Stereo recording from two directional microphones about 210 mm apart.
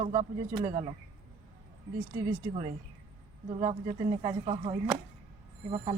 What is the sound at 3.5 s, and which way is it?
Speech, 30° right (ahead or behind).